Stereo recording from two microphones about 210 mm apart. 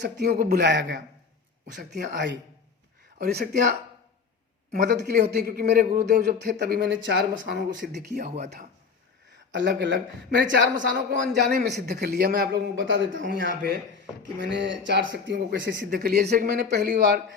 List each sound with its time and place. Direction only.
0.0 s a man's voice: 50° right (ahead or behind)
9.6 s a man's voice: 55° right (ahead or behind)
15.9 s a man's voice: 45° right (ahead or behind)